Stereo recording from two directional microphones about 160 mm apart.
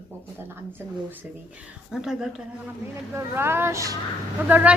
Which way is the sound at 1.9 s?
5° right (ahead or behind).